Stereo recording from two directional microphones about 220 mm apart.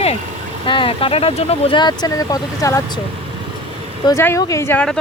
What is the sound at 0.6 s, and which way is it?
Speech, 20° left (ahead or behind).